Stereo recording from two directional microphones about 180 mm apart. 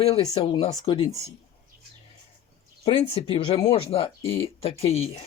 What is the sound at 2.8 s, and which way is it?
Speech, 35° left (ahead or behind).